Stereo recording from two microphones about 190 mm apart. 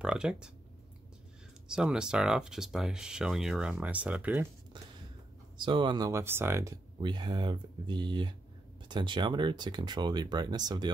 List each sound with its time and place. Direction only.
0.0 s speech: 5° right (ahead or behind)
1.7 s speech: 5° right (ahead or behind)
5.6 s speech: 25° right (ahead or behind)
7.0 s speech: 25° right (ahead or behind)